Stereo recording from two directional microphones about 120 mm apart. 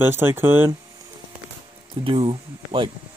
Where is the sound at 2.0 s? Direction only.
45° right (ahead or behind).